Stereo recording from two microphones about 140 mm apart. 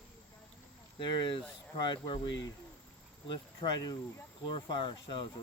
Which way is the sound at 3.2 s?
30° left (ahead or behind).